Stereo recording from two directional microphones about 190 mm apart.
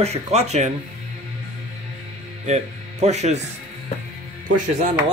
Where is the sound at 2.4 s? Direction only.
35° right (ahead or behind).